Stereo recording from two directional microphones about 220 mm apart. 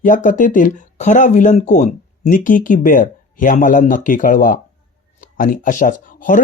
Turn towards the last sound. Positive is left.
turn(degrees=35)  # may be behind; listen again after turning